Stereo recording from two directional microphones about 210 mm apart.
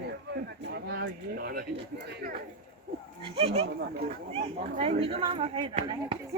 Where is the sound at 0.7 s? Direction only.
50° right (ahead or behind).